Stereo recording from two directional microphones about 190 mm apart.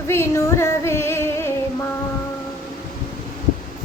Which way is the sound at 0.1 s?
15° left (ahead or behind).